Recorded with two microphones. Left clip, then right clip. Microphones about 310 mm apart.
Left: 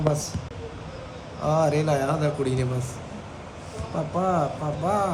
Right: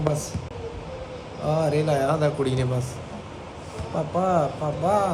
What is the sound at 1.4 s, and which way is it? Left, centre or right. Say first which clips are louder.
A man's voice: left 1 dB; centre.